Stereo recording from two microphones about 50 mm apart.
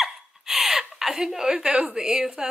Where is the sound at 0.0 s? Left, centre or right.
Centre.